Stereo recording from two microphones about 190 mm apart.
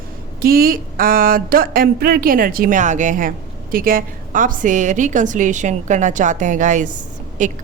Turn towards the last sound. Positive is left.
turn(degrees=-40)  # may be behind; listen again after turning